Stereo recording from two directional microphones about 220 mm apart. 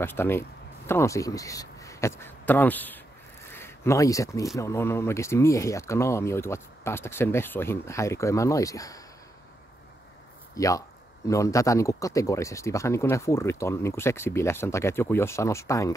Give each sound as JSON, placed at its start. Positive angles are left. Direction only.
{"t": 0.0, "sound": "speech", "side_deg": 10}
{"t": 10.5, "sound": "speech", "side_deg": 15}